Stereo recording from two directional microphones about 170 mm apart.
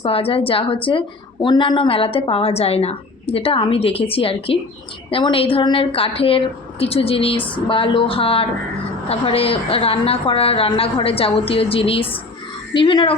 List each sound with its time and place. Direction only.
0.0 s a woman's voice: 35° left (ahead or behind)